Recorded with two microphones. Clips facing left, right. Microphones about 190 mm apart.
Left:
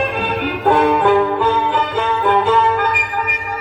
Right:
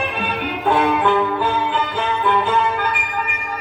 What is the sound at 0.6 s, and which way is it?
Music, 45° left (ahead or behind).